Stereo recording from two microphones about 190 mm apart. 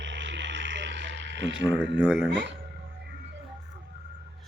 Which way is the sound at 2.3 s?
70° right (ahead or behind).